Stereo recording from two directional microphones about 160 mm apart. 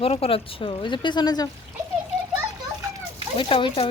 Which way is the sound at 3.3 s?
30° left (ahead or behind).